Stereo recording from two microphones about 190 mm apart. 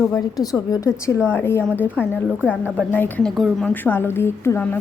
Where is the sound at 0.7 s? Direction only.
15° left (ahead or behind).